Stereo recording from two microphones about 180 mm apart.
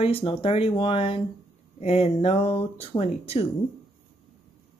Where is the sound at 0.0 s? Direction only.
30° left (ahead or behind).